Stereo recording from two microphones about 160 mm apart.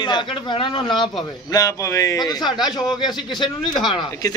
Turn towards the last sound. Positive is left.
turn(degrees=25)  # may be behind; listen again after turning